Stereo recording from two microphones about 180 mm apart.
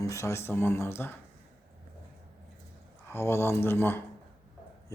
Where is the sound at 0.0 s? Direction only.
15° left (ahead or behind).